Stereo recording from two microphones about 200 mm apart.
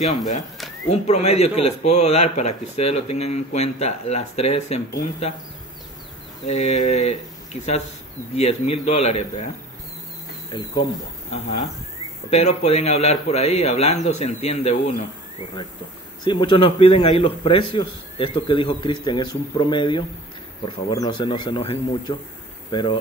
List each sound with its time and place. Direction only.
0.8 s speech: 35° left (ahead or behind)
6.4 s speech: 35° left (ahead or behind)
11.3 s speech: 35° left (ahead or behind)
16.3 s a man's voice: 25° left (ahead or behind)